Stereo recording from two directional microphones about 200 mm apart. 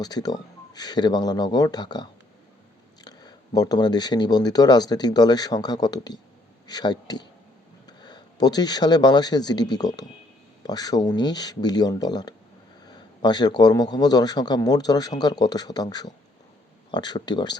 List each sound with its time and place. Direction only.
0.0 s a man's voice: 20° left (ahead or behind)